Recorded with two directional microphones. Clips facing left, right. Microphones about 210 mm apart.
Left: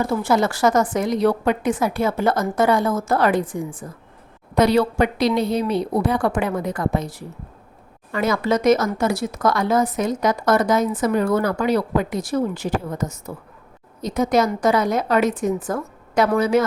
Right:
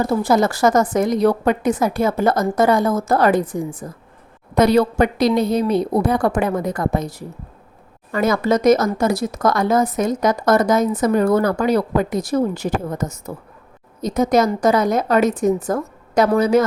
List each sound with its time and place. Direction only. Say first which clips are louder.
0.0 s a woman's voice: right 3 dB; 35° right (ahead or behind)